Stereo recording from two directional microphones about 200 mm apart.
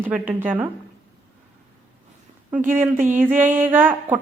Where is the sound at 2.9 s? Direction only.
40° right (ahead or behind).